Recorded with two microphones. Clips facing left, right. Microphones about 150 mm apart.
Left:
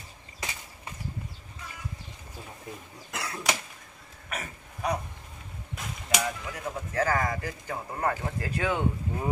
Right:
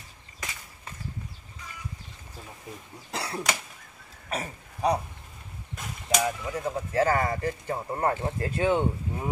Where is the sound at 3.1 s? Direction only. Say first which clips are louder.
Right 3 dB; 30° right (ahead or behind).